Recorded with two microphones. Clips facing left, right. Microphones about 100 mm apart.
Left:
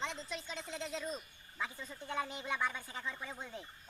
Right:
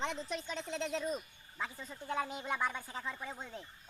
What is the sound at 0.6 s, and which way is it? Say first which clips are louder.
Speech: right 5 dB; 60° right (ahead or behind).